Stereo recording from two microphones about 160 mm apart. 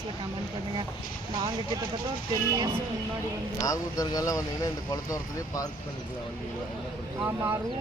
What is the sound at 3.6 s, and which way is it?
Speech, 20° left (ahead or behind).